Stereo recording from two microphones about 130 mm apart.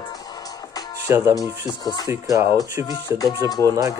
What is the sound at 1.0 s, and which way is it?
Speech, 25° right (ahead or behind).